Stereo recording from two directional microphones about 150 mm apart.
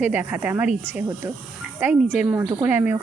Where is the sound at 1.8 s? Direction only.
15° right (ahead or behind).